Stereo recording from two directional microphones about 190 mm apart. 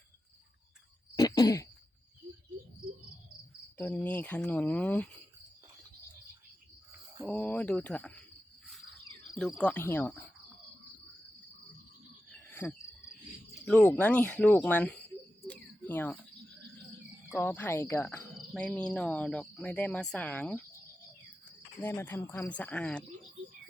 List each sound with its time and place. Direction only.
1.1 s throat clearing: 20° left (ahead or behind)
3.8 s speech: 10° left (ahead or behind)
7.3 s speech: 5° left (ahead or behind)
9.3 s speech: centre (ahead or behind)
12.3 s cricket: 10° left (ahead or behind)
13.5 s speech: 5° left (ahead or behind)
15.4 s cricket: 10° left (ahead or behind)
17.3 s speech: 10° left (ahead or behind)
21.8 s speech: 10° left (ahead or behind)